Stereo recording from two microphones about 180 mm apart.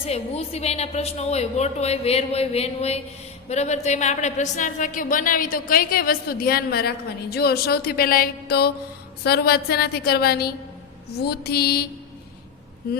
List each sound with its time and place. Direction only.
0.0 s a woman's voice: 35° left (ahead or behind); by 11.9 s 60° left (ahead or behind)